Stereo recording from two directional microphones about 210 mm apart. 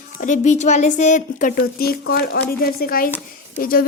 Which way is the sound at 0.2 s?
35° left (ahead or behind).